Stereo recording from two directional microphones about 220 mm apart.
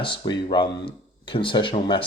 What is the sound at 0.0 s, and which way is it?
Speech, 20° left (ahead or behind).